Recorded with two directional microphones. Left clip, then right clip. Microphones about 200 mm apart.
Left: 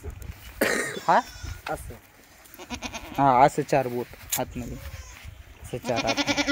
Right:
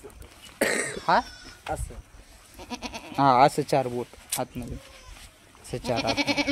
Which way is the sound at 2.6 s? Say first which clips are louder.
Left 1 dB; 25° right (ahead or behind).